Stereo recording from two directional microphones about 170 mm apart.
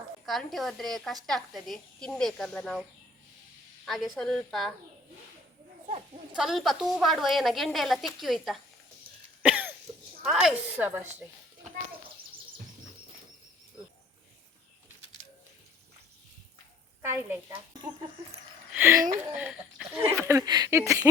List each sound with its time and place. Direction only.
0.3 s a woman's voice: centre (ahead or behind)
3.8 s a woman's voice: centre (ahead or behind)
6.3 s a woman's voice: centre (ahead or behind)
9.4 s cough: 10° right (ahead or behind)
10.2 s speech: 5° right (ahead or behind)
17.0 s speech: 10° right (ahead or behind)
18.7 s speech: 10° right (ahead or behind)